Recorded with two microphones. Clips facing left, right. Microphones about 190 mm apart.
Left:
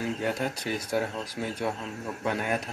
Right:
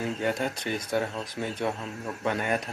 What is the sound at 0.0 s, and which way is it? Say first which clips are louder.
Speech: right 1 dB; 5° left (ahead or behind).